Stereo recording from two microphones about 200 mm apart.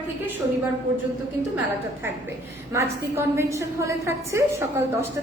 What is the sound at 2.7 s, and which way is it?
A woman's voice, 15° right (ahead or behind).